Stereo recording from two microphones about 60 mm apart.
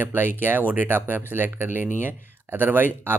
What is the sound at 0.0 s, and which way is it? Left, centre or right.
Speech, right.